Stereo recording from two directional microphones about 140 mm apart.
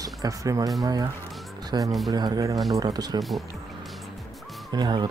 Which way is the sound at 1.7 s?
30° right (ahead or behind).